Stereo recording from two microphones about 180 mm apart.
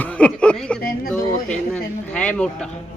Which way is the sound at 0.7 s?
55° left (ahead or behind).